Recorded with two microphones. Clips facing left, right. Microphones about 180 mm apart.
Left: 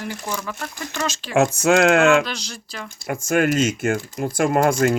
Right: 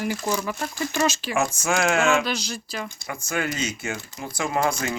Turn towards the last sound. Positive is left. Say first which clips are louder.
# left 7 dB
turn(degrees=50)  # may be behind; listen again after turning